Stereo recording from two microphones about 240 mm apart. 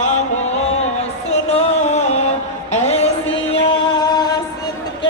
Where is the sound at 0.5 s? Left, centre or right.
Left.